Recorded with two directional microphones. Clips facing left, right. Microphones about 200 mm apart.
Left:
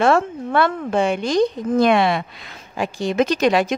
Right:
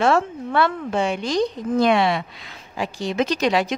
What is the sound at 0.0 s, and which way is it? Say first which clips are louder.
Speech: left 2 dB; 50° left (ahead or behind).